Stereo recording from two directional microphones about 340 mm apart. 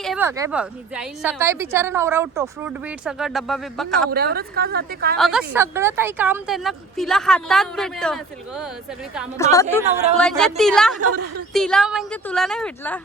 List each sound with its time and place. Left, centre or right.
0.0 s a woman's voice: centre
4.1 s a woman's voice: right
5.1 s a woman's voice: centre
9.4 s a woman's voice: centre
11.0 s a woman's voice: right
11.5 s a woman's voice: centre